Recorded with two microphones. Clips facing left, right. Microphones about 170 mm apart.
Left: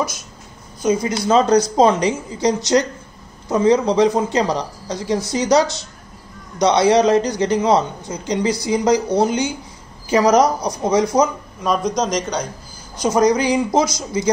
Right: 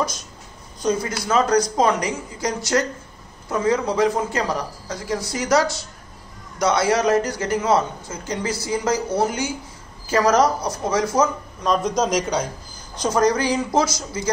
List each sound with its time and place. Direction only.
0.8 s a man's voice: 20° left (ahead or behind)
11.6 s a man's voice: centre (ahead or behind)
12.9 s a man's voice: 15° left (ahead or behind)